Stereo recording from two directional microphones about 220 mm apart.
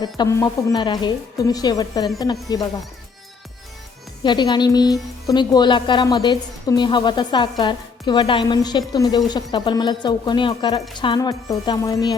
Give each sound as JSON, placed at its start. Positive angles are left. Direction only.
{"t": 0.0, "sound": "a woman's voice", "side_deg": 15}
{"t": 4.2, "sound": "a woman's voice", "side_deg": 20}